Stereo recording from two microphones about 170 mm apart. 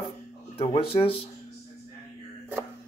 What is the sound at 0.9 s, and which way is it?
Speech, 35° left (ahead or behind).